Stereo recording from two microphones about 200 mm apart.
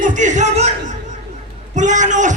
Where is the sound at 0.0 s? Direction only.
40° right (ahead or behind).